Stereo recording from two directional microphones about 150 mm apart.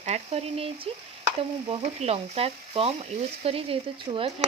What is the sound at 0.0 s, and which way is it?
Speech, 45° right (ahead or behind).